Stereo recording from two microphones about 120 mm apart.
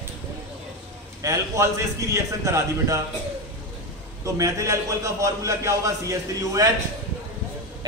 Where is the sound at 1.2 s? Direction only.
25° right (ahead or behind).